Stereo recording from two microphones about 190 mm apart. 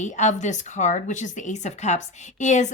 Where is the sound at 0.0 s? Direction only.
40° left (ahead or behind).